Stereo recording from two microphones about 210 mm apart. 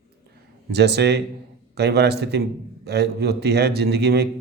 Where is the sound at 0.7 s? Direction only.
50° right (ahead or behind).